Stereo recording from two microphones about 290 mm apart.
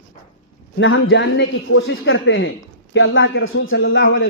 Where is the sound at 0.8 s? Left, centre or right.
Left.